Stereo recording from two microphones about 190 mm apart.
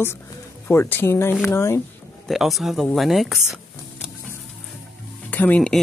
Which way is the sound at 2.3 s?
Centre (ahead or behind).